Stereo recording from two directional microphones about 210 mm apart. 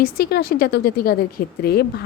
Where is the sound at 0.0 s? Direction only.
45° left (ahead or behind).